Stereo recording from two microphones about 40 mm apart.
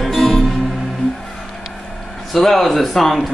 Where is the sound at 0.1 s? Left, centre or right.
Centre.